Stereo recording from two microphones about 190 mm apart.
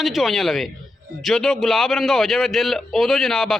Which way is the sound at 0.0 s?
Centre (ahead or behind).